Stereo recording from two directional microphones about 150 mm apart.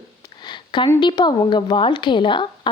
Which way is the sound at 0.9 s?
30° left (ahead or behind).